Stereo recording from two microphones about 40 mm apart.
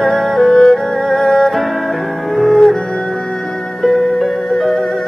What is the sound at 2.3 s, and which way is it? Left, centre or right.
Cello, centre.